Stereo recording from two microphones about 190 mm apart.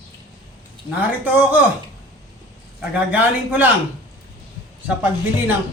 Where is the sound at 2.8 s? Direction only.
10° right (ahead or behind).